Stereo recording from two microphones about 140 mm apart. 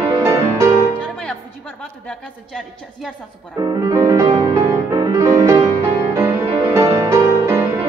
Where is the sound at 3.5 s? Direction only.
25° right (ahead or behind).